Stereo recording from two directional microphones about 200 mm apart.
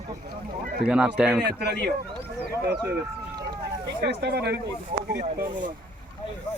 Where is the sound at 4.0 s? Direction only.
55° right (ahead or behind).